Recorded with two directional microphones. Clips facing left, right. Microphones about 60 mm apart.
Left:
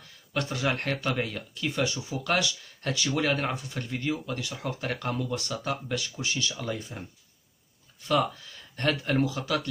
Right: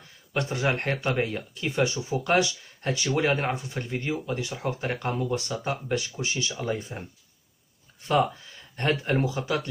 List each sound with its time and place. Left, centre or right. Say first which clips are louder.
0.3 s speech: right 2 dB; right